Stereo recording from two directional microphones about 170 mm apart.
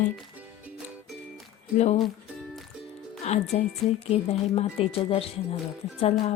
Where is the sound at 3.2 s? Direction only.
40° left (ahead or behind).